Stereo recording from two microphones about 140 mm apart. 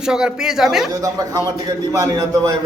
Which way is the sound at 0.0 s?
5° right (ahead or behind).